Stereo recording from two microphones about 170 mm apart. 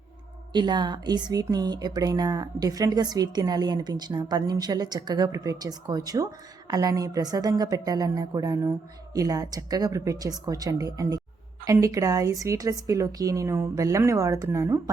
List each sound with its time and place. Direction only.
0.5 s speech: 25° right (ahead or behind)